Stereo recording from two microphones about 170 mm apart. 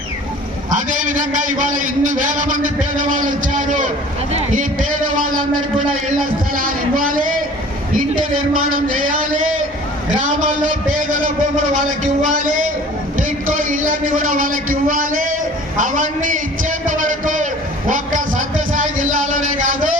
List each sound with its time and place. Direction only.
0.7 s a man's voice: 50° right (ahead or behind)
5.1 s a man's voice: 55° right (ahead or behind)
6.6 s speech: 55° right (ahead or behind)
10.2 s a man's voice: 45° right (ahead or behind)
13.7 s a man's voice: 55° right (ahead or behind)
16.8 s a sound: 50° right (ahead or behind)